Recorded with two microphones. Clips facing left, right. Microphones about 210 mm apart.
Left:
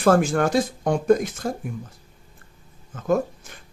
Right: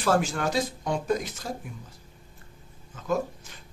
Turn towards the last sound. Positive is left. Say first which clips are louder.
# left 6 dB
turn(degrees=50)  # may be behind; listen again after turning